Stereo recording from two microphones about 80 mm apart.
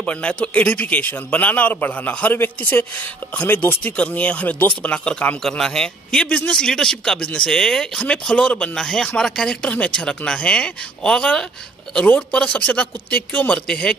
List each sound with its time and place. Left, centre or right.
0.0 s a man's voice: centre